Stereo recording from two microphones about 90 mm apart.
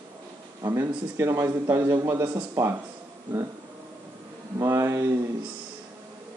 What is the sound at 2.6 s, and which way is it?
Speech, 40° right (ahead or behind).